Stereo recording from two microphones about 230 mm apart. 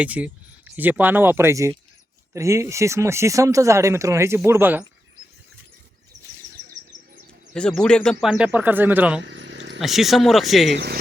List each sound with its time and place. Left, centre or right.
0.0 s speech: centre
6.1 s bird: right
7.5 s speech: centre
9.2 s a sound: right
9.8 s speech: centre
10.7 s speech: right